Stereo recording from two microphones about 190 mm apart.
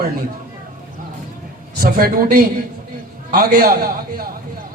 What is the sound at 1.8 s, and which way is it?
A man's voice, 50° right (ahead or behind).